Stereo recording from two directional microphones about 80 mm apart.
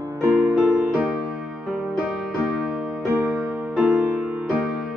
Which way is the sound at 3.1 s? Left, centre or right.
Right.